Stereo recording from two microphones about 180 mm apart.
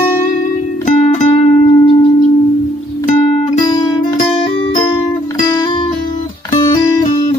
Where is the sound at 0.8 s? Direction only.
40° left (ahead or behind).